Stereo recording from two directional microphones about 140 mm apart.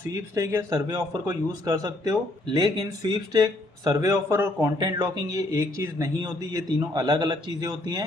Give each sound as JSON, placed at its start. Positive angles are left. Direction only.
{"t": 0.4, "sound": "speech", "side_deg": -20}